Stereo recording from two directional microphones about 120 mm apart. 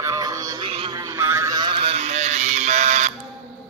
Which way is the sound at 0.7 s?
50° right (ahead or behind).